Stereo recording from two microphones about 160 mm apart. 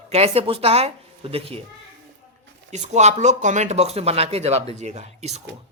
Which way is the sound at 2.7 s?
45° right (ahead or behind).